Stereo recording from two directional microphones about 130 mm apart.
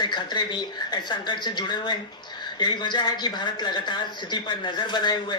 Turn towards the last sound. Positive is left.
turn(degrees=35)  # may be behind; listen again after turning